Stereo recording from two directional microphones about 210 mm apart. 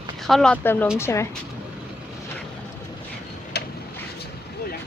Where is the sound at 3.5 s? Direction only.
50° left (ahead or behind).